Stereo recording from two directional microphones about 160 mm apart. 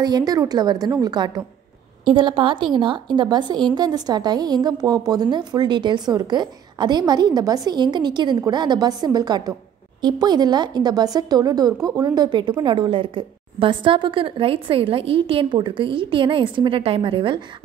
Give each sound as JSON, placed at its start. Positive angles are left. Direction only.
{"t": 0.0, "sound": "a woman's voice", "side_deg": -25}